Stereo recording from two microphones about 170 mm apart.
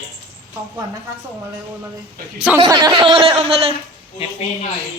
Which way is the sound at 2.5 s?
25° right (ahead or behind).